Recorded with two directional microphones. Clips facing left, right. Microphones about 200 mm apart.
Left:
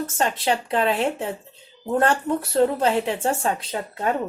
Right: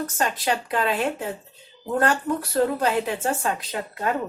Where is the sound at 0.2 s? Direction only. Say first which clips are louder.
Left 3 dB; 25° left (ahead or behind).